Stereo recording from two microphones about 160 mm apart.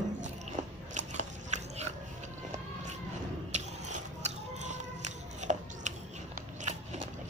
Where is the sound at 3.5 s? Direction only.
45° right (ahead or behind).